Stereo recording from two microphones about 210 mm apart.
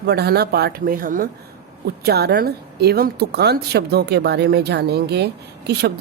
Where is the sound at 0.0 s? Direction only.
50° right (ahead or behind).